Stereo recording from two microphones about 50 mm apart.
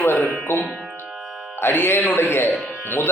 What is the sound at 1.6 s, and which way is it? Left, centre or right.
Music, left.